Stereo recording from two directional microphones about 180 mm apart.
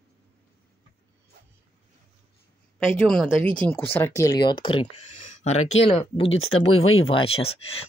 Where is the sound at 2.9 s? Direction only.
5° left (ahead or behind).